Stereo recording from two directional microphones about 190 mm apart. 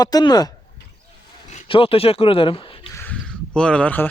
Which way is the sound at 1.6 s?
30° left (ahead or behind).